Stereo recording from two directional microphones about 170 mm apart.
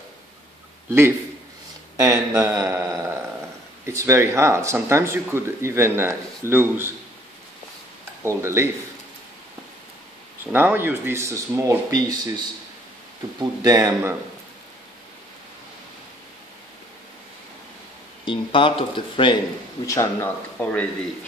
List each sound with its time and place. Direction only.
2.0 s speech: 20° right (ahead or behind)
8.2 s speech: 15° right (ahead or behind)
10.4 s speech: 10° right (ahead or behind)
13.4 s speech: 20° right (ahead or behind)
18.2 s speech: 30° left (ahead or behind)
19.9 s a man's voice: 15° left (ahead or behind)